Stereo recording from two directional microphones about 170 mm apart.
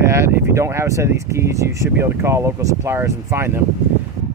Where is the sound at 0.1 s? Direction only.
15° right (ahead or behind).